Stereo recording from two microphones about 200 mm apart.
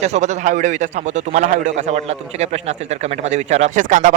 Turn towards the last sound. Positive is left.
turn(degrees=-40)  # may be behind; listen again after turning